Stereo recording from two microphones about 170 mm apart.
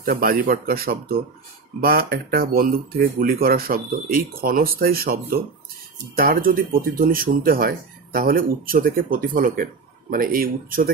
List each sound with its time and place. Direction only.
0.0 s speech: 60° right (ahead or behind)